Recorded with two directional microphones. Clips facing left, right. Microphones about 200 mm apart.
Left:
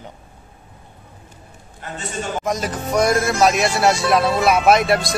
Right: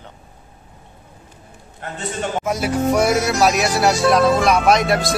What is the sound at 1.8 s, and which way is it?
Speech, 55° right (ahead or behind).